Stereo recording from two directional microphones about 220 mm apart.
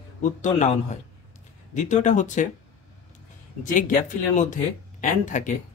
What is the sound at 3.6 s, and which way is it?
Speech, 35° left (ahead or behind).